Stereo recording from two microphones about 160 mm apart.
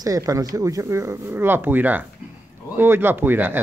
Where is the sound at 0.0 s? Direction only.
20° right (ahead or behind).